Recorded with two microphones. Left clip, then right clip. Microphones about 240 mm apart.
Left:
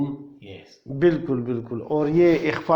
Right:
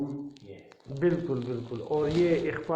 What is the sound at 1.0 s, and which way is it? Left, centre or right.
A man's voice, left.